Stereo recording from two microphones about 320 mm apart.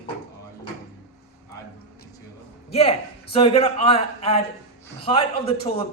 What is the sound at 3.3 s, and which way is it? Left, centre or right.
A man's voice, centre.